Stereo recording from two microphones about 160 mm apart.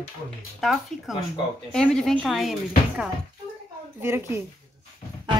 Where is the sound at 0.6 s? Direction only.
Centre (ahead or behind).